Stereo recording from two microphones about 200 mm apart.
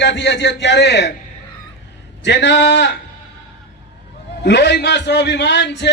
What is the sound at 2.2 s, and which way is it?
Speech, 60° left (ahead or behind).